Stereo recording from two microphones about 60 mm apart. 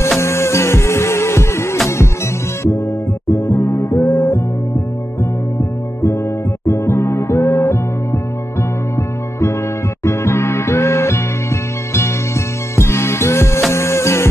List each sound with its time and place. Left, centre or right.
0.2 s music: left
3.3 s music: left
5.6 s music: left
10.0 s music: left